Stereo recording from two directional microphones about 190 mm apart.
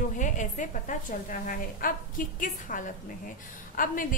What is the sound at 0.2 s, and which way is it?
A woman's voice, 40° left (ahead or behind).